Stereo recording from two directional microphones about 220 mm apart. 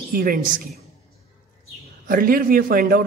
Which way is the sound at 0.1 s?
40° right (ahead or behind).